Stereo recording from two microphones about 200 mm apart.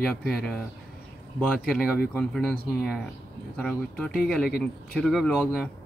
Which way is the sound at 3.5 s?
5° left (ahead or behind).